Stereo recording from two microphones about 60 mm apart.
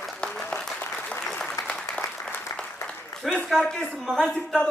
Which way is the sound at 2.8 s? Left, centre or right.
Left.